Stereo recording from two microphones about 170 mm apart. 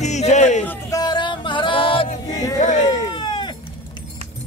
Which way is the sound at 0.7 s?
20° left (ahead or behind).